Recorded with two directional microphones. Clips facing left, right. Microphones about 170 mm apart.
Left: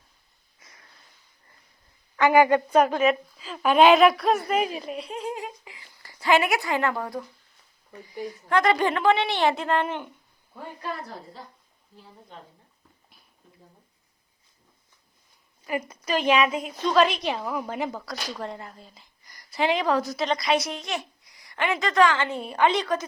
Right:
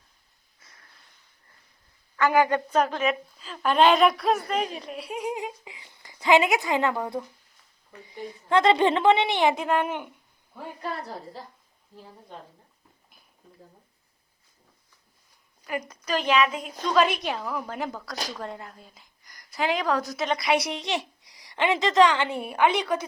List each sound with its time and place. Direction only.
0.6 s a sound: 15° left (ahead or behind)
2.2 s a woman's voice: 10° left (ahead or behind)
5.0 s speech: 10° right (ahead or behind)
8.2 s a woman's voice: 25° right (ahead or behind)
15.6 s a woman's voice: 5° left (ahead or behind)
21.4 s a woman's voice: 20° right (ahead or behind)